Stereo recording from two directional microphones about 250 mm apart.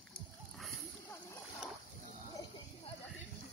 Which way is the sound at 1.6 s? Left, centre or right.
Centre.